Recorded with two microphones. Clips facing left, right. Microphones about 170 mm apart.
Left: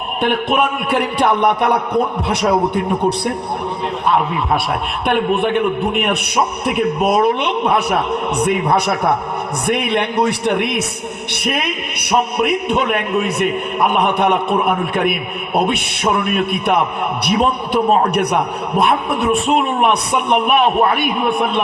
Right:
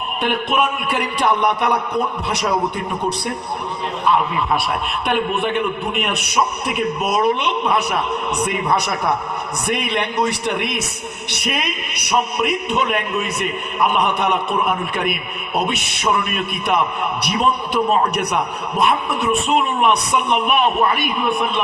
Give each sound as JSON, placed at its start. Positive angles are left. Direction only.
{"t": 0.2, "sound": "a man's voice", "side_deg": 55}
{"t": 5.0, "sound": "a man's voice", "side_deg": 55}